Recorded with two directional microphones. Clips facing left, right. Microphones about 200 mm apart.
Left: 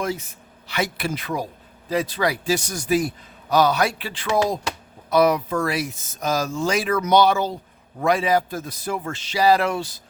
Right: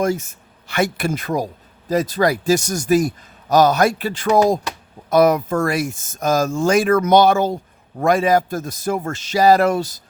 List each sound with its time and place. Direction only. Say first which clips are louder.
0.0 s speech: right 7 dB; 45° right (ahead or behind)